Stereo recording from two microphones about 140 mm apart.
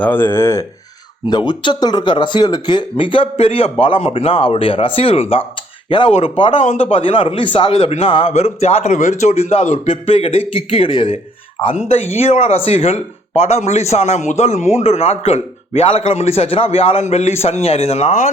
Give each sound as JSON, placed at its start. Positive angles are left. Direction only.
{"t": 0.0, "sound": "speech", "side_deg": 15}
{"t": 1.3, "sound": "a man's voice", "side_deg": 35}
{"t": 6.6, "sound": "speech", "side_deg": 55}
{"t": 6.9, "sound": "speech", "side_deg": 40}
{"t": 8.3, "sound": "a man's voice", "side_deg": 50}